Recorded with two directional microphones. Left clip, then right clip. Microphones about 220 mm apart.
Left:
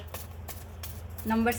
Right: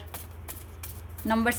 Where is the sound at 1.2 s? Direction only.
50° right (ahead or behind).